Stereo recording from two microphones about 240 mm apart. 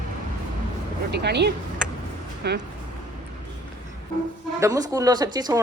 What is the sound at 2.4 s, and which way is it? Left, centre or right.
Speech, right.